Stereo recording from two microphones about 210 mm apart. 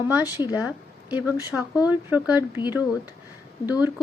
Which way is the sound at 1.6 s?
20° left (ahead or behind).